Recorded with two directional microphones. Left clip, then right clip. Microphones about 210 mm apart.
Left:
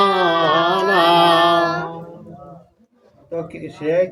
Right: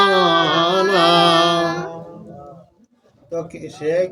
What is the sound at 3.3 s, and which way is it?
Speech, centre (ahead or behind).